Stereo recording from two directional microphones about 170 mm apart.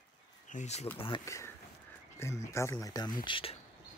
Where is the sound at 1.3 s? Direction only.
15° left (ahead or behind).